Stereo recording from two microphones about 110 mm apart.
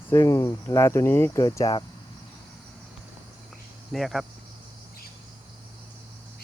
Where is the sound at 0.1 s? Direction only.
30° left (ahead or behind).